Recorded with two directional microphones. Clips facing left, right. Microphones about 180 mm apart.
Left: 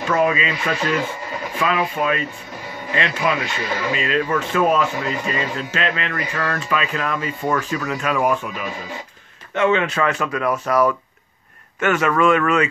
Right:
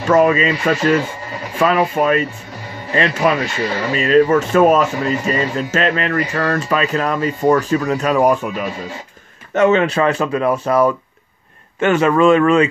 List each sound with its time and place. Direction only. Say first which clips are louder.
0.1 s speech: right 7 dB; 45° right (ahead or behind)